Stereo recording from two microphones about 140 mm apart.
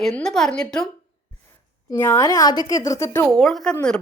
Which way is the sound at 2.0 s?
20° left (ahead or behind).